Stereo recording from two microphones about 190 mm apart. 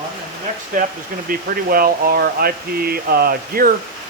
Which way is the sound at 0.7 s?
45° right (ahead or behind).